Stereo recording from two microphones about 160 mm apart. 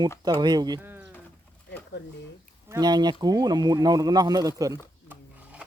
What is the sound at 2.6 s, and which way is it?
Speech, 25° right (ahead or behind).